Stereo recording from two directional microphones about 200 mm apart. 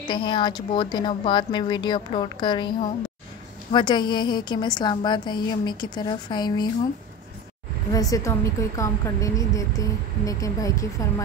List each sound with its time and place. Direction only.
0.1 s a woman's voice: 25° left (ahead or behind)
3.7 s a woman's voice: 20° left (ahead or behind)
7.9 s a woman's voice: 15° left (ahead or behind)